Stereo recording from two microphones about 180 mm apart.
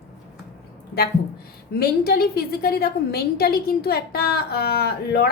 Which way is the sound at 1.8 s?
60° left (ahead or behind).